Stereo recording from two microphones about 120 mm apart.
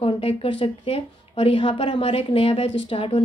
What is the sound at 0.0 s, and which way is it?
A woman's voice, 55° left (ahead or behind).